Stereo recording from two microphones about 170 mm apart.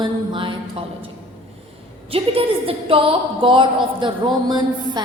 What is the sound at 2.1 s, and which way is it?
A woman's voice, 35° right (ahead or behind).